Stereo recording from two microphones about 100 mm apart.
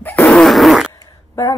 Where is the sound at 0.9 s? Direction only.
30° left (ahead or behind).